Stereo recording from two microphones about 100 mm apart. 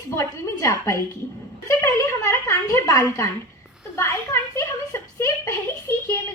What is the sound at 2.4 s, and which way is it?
A woman's voice, 25° left (ahead or behind).